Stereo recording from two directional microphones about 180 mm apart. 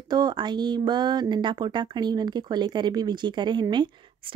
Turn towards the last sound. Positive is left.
turn(degrees=-25)  # may be behind; listen again after turning